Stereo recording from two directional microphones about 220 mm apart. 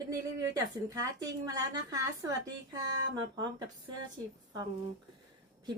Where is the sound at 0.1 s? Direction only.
15° right (ahead or behind).